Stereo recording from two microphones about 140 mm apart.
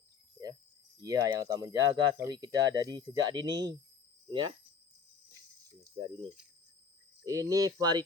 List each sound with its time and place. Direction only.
1.0 s speech: 25° right (ahead or behind)
7.3 s speech: 25° right (ahead or behind)